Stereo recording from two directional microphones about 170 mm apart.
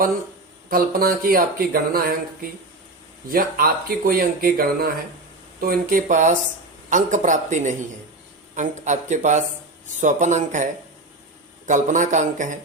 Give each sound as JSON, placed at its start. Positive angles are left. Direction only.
{"t": 0.7, "sound": "speech", "side_deg": -60}